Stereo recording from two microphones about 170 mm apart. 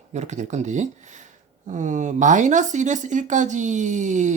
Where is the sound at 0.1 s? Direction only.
45° right (ahead or behind).